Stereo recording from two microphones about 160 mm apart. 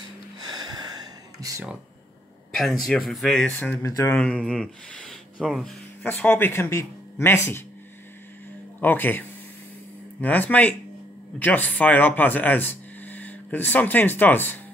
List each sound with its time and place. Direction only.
0.5 s a sound: 25° right (ahead or behind)
2.8 s speech: centre (ahead or behind); by 4.2 s 15° left (ahead or behind)
4.2 s speech: 5° left (ahead or behind)
6.0 s speech: 10° left (ahead or behind)
8.8 s speech: 10° left (ahead or behind)
10.2 s speech: 10° left (ahead or behind)